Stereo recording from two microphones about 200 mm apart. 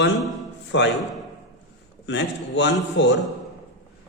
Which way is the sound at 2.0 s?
60° left (ahead or behind).